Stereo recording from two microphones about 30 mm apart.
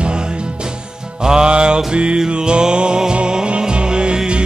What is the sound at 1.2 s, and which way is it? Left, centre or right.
Mantra, right.